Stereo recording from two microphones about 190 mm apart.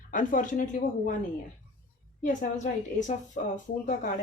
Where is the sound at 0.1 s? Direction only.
45° left (ahead or behind).